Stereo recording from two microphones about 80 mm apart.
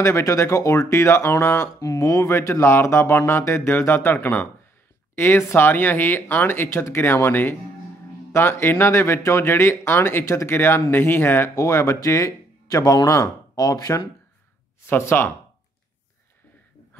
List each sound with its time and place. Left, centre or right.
0.0 s speech: left
1.8 s speech: left
11.5 s speech: left
14.9 s speech: left